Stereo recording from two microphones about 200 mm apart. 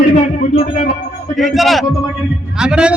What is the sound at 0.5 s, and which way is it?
Speech, 45° left (ahead or behind).